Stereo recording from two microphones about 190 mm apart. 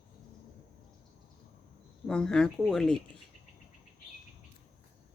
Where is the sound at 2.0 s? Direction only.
5° left (ahead or behind).